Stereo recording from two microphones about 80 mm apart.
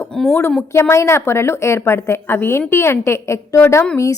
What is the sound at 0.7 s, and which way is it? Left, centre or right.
A woman's voice, left.